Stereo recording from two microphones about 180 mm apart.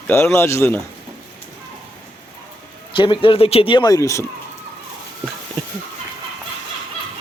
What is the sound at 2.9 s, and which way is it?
Speech, 25° left (ahead or behind).